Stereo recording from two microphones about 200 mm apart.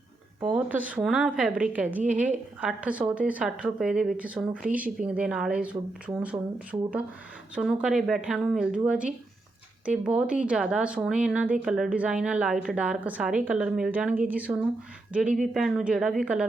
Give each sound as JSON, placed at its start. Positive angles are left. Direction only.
{"t": 0.5, "sound": "a woman's voice", "side_deg": -5}
{"t": 6.7, "sound": "speech", "side_deg": -20}
{"t": 7.5, "sound": "a woman's voice", "side_deg": -5}